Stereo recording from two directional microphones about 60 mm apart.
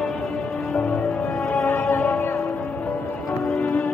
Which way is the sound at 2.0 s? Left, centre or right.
Left.